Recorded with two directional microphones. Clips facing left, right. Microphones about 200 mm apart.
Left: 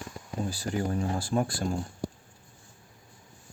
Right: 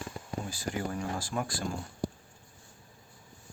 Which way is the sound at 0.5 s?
35° left (ahead or behind).